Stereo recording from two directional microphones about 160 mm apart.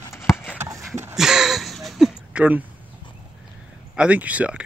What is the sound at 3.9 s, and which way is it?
Speech, 10° right (ahead or behind).